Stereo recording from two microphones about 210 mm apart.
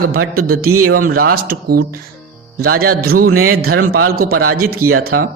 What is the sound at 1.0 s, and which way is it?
A man's voice, 45° right (ahead or behind).